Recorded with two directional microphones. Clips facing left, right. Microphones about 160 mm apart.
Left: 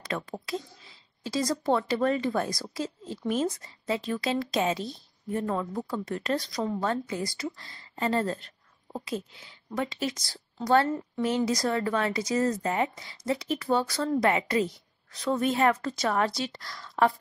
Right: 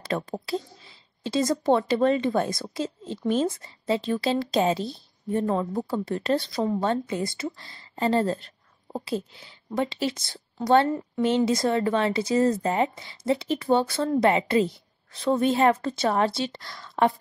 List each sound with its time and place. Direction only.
0.0 s speech: 30° right (ahead or behind)